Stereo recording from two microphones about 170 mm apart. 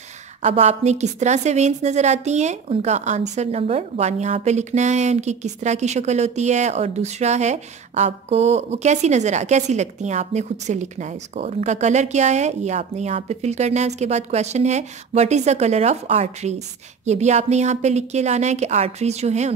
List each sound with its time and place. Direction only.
0.4 s a woman's voice: 40° right (ahead or behind)